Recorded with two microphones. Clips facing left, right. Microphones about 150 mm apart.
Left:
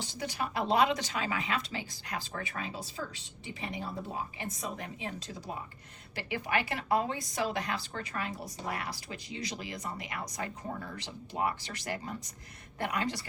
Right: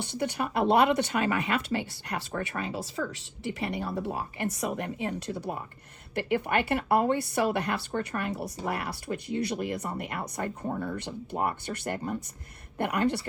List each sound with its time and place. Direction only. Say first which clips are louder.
0.0 s a woman's voice: right 6 dB; 65° right (ahead or behind)